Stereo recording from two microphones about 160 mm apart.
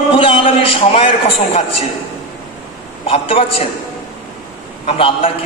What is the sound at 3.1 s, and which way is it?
Speech, 35° left (ahead or behind).